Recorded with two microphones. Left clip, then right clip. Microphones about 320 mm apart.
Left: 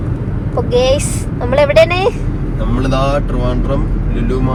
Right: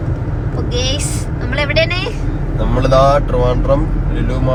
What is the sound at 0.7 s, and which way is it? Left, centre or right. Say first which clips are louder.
Speech: left 8 dB; centre.